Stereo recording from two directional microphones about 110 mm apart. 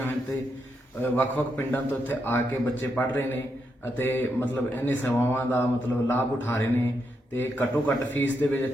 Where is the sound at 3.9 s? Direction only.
20° left (ahead or behind).